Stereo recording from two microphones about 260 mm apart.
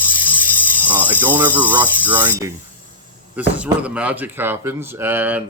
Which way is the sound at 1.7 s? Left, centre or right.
Centre.